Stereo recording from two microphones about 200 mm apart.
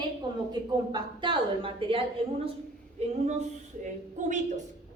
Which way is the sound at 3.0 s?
30° right (ahead or behind).